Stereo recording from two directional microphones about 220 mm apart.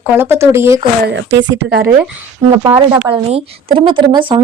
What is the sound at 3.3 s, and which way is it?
Speech, 25° right (ahead or behind).